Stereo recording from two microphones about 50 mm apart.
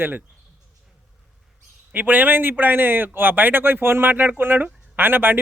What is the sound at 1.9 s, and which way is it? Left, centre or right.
A man's voice, right.